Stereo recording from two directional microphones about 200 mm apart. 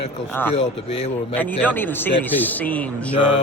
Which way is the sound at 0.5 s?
30° left (ahead or behind).